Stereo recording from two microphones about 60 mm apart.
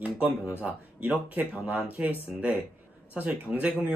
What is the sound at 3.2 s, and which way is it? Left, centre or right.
Speech, right.